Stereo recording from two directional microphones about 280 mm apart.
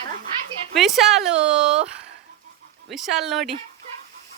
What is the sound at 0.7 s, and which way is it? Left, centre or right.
Speech, centre.